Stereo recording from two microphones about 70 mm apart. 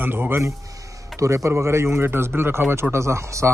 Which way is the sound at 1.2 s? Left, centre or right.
Right.